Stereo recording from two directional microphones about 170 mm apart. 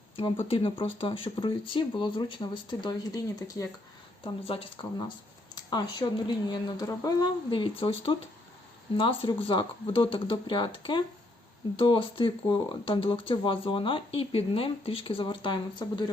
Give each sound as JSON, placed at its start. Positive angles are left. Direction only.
{"t": 0.4, "sound": "speech", "side_deg": 35}
{"t": 4.2, "sound": "speech", "side_deg": 30}